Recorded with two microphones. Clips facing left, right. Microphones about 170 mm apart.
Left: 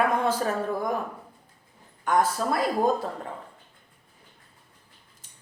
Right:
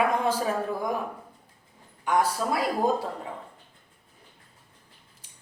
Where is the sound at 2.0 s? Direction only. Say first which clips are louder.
Left 1 dB; 10° right (ahead or behind).